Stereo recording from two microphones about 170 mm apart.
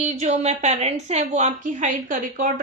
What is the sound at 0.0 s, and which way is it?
A woman's voice, 40° right (ahead or behind).